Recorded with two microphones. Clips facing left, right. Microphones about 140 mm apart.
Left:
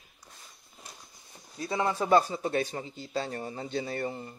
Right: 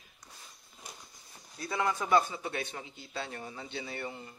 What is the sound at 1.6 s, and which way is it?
A man's voice, 20° left (ahead or behind).